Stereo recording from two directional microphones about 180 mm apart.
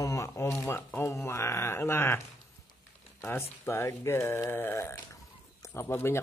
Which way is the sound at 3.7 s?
15° left (ahead or behind).